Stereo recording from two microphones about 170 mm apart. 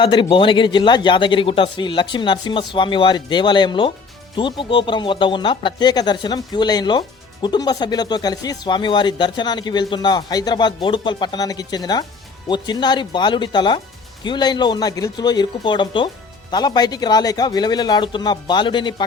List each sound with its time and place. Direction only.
0.0 s speech: 30° left (ahead or behind)